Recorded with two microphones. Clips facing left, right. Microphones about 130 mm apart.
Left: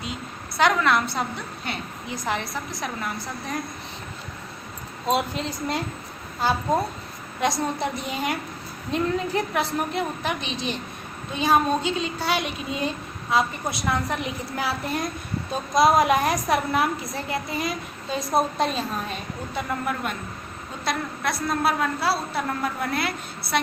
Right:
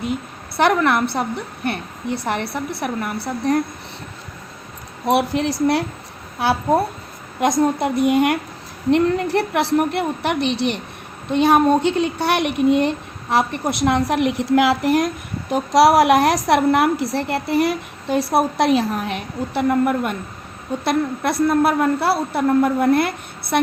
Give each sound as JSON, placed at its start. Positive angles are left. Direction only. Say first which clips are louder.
{"t": 0.0, "sound": "a woman's voice", "louder": "right 8 dB", "side_deg": -55}
{"t": 5.0, "sound": "a woman's voice", "louder": "right 7 dB", "side_deg": -75}
{"t": 7.4, "sound": "a woman's voice", "louder": "right 7 dB", "side_deg": -50}
{"t": 20.8, "sound": "a woman's voice", "louder": "right 7 dB", "side_deg": -55}